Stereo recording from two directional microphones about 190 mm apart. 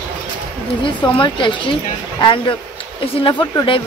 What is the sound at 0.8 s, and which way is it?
Speech, 25° left (ahead or behind).